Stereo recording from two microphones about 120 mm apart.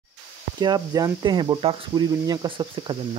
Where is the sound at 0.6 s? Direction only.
35° right (ahead or behind).